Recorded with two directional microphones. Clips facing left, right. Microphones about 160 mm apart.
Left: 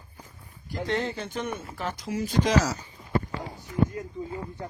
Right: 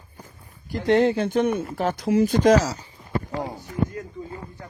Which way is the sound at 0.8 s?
55° right (ahead or behind).